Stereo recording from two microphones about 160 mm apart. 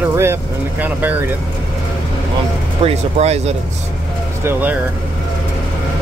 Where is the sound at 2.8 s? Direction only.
45° right (ahead or behind).